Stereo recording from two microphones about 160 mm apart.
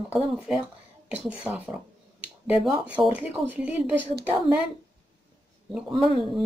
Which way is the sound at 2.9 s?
10° right (ahead or behind).